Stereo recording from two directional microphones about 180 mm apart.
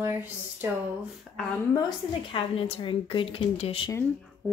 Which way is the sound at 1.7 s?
25° left (ahead or behind).